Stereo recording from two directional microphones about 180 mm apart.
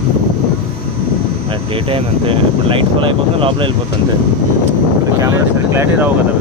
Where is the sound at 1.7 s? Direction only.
30° right (ahead or behind).